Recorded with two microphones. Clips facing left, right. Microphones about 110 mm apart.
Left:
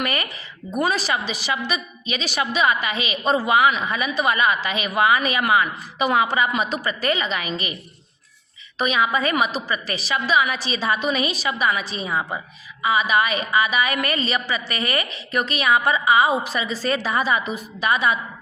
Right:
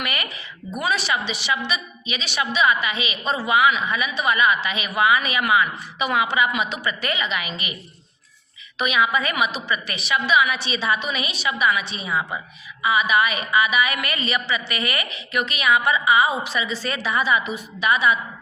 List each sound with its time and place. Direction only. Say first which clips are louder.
0.0 s a woman's voice: left 3 dB; 40° left (ahead or behind)
8.8 s a woman's voice: left 1 dB; 35° left (ahead or behind)